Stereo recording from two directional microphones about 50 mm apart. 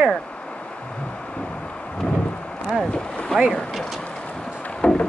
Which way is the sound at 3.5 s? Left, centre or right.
Centre.